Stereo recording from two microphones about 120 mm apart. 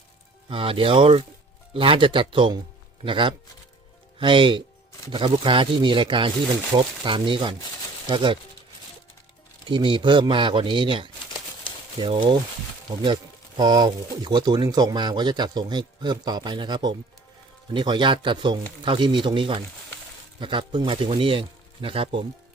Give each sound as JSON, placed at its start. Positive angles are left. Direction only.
{"t": 0.4, "sound": "speech", "side_deg": -50}
{"t": 9.6, "sound": "speech", "side_deg": -45}
{"t": 13.6, "sound": "speech", "side_deg": -35}